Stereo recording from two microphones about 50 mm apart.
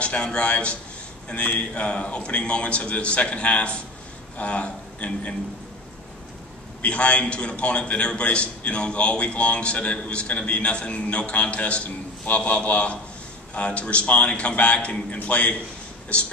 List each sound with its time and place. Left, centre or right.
0.0 s a man's voice: left
6.8 s a man's voice: left